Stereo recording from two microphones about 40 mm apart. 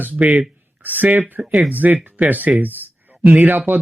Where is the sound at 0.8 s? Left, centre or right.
Right.